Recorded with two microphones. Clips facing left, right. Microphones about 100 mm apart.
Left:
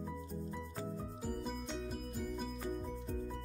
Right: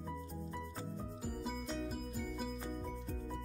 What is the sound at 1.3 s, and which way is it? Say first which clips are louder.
Music: even; centre (ahead or behind).